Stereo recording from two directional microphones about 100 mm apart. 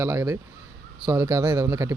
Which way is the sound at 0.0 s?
20° right (ahead or behind).